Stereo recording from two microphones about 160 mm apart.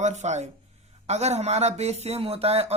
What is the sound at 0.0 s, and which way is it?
Speech, 45° right (ahead or behind).